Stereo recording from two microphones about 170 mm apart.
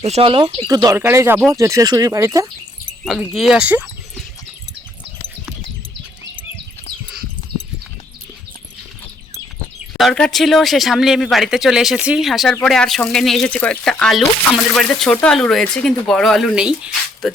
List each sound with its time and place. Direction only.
0.0 s speech: 35° right (ahead or behind); by 2.5 s 20° right (ahead or behind)
3.0 s speech: centre (ahead or behind)
10.0 s speech: 5° left (ahead or behind)